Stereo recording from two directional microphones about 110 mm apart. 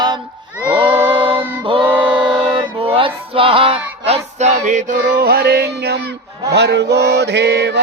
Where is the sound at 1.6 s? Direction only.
50° right (ahead or behind).